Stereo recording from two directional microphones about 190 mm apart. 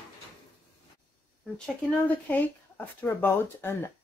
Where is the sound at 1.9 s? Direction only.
10° left (ahead or behind).